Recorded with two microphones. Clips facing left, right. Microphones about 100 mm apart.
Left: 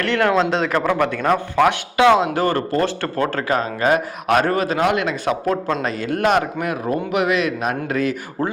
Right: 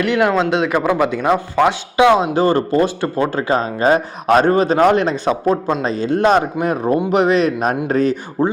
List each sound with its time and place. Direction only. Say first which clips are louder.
0.0 s a man's voice: right 2 dB; 10° right (ahead or behind); by 8.1 s 30° right (ahead or behind)
8.4 s speech: right 6 dB; 20° right (ahead or behind)